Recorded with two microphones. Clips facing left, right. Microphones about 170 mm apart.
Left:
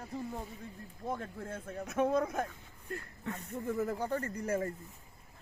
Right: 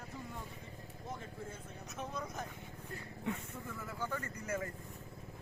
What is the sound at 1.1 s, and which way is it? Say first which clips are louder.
Speech: left 7 dB; 55° left (ahead or behind).